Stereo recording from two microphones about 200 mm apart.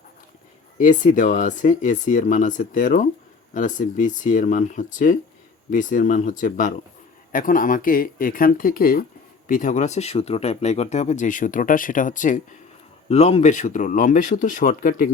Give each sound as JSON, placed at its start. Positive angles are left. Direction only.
{"t": 0.8, "sound": "speech", "side_deg": 40}